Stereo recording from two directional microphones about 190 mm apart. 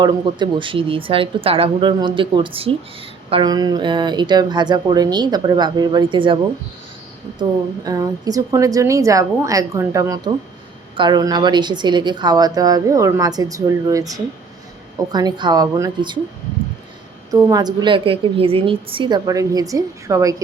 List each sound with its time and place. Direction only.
0.0 s a woman's voice: 25° right (ahead or behind)
7.9 s a woman's voice: 20° right (ahead or behind)
17.3 s a woman's voice: 20° right (ahead or behind)